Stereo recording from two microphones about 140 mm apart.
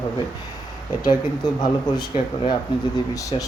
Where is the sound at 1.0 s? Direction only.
30° left (ahead or behind).